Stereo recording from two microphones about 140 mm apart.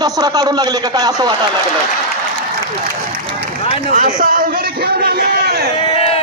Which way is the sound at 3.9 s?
75° right (ahead or behind).